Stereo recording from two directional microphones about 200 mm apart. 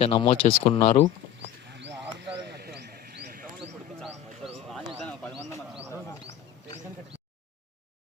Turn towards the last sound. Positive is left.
turn(degrees=15)  # may be behind; listen again after turning